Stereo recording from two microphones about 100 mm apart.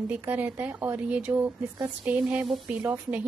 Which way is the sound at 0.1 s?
20° right (ahead or behind).